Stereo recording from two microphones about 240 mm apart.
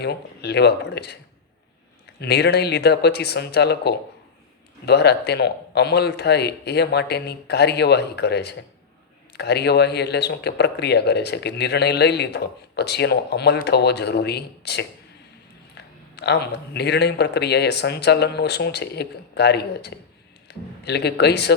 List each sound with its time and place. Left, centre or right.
0.0 s speech: left
2.2 s speech: left